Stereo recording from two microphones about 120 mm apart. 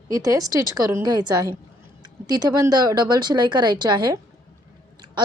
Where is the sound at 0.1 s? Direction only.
30° right (ahead or behind).